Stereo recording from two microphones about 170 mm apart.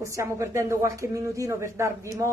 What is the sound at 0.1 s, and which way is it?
A woman's voice, 15° right (ahead or behind).